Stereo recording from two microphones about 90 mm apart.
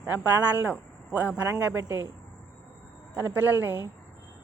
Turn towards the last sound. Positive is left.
turn(degrees=-20)  # may be behind; listen again after turning